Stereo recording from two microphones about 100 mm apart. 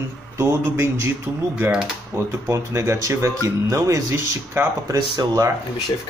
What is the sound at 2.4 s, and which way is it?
Speech, 30° right (ahead or behind).